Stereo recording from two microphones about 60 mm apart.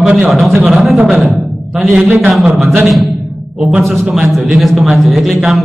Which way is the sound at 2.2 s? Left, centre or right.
Centre.